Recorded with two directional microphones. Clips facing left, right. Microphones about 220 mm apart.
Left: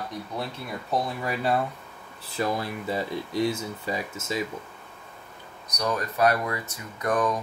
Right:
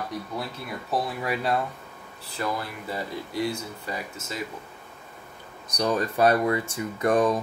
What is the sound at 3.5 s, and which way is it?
Speech, 20° left (ahead or behind).